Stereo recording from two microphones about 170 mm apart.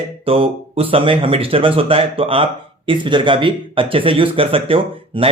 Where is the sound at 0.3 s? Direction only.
35° right (ahead or behind).